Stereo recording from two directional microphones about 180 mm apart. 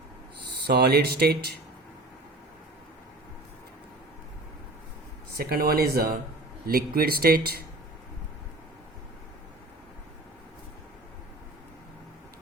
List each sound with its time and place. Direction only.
0.7 s speech: 65° right (ahead or behind)
5.4 s speech: 60° right (ahead or behind)